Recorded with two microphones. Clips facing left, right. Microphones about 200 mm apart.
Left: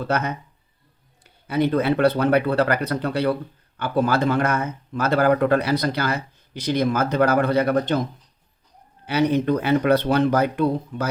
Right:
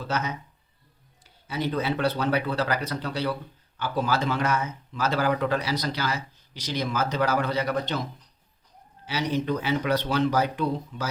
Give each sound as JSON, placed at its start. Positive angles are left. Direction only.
{"t": 0.1, "sound": "speech", "side_deg": 55}
{"t": 9.0, "sound": "speech", "side_deg": 55}